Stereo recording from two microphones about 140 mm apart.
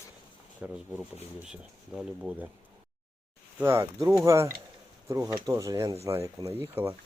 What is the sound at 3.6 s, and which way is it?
Speech, 15° right (ahead or behind).